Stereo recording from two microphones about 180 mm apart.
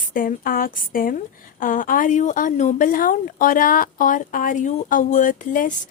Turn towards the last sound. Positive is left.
turn(degrees=45)  # may be behind; listen again after turning